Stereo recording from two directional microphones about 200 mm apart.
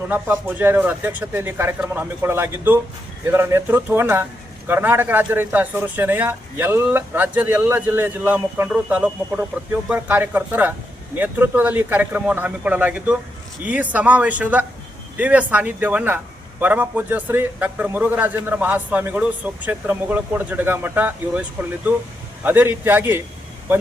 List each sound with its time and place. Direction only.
0.1 s a man's voice: 10° right (ahead or behind)
22.4 s a man's voice: 10° right (ahead or behind)